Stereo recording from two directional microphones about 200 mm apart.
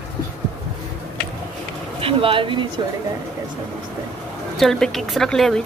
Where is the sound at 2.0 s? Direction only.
25° right (ahead or behind).